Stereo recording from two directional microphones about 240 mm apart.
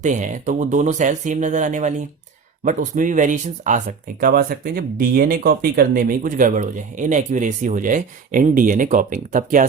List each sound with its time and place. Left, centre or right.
0.0 s speech: right